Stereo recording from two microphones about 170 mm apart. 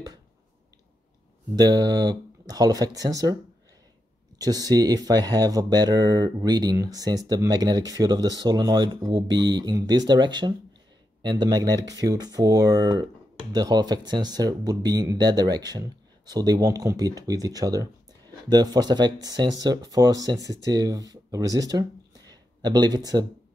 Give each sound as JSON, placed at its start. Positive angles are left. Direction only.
{"t": 1.5, "sound": "speech", "side_deg": -25}
{"t": 4.4, "sound": "speech", "side_deg": -20}